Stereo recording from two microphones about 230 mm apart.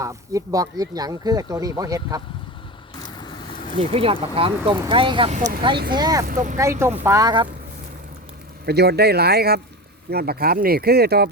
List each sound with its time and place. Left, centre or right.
0.0 s speech: centre
3.2 s vehicle: centre
3.8 s speech: right
5.9 s speech: centre
6.2 s speech: right
6.6 s speech: centre
8.6 s speech: right